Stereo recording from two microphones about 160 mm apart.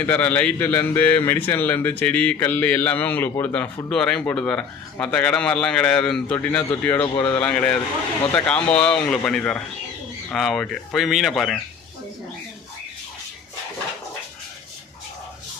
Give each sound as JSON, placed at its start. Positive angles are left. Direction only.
{"t": 0.0, "sound": "a man's voice", "side_deg": 10}
{"t": 7.0, "sound": "speech", "side_deg": 30}
{"t": 7.3, "sound": "a man's voice", "side_deg": 10}